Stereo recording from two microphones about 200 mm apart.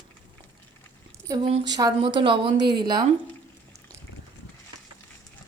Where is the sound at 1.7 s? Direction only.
20° right (ahead or behind).